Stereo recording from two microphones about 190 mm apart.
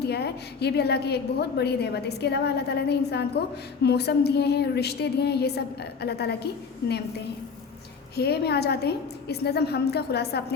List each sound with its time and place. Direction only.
0.0 s a woman's voice: 60° left (ahead or behind)
8.1 s a woman's voice: 60° left (ahead or behind)